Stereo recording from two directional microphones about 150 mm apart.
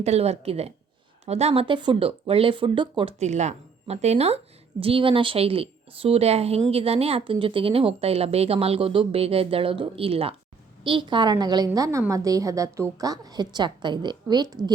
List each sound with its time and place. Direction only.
0.0 s a woman's voice: 45° right (ahead or behind)
3.2 s a woman's voice: 50° right (ahead or behind); by 14.6 s 25° right (ahead or behind)